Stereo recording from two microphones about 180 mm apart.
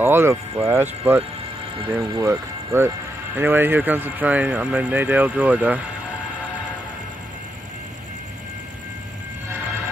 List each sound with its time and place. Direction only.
0.0 s speech: 15° right (ahead or behind)